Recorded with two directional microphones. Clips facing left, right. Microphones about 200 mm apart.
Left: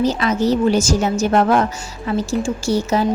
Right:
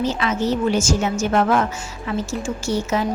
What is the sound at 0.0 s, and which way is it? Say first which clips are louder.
A woman's voice: left 4 dB; 40° left (ahead or behind).